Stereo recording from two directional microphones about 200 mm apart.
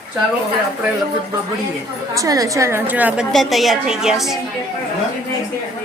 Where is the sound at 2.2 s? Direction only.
15° right (ahead or behind); by 4.4 s centre (ahead or behind).